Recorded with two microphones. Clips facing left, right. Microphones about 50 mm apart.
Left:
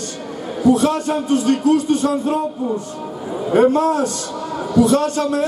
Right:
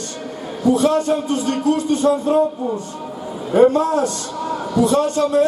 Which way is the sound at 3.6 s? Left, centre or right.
Left.